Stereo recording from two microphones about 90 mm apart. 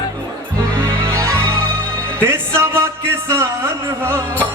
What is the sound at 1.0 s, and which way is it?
Music, 35° right (ahead or behind).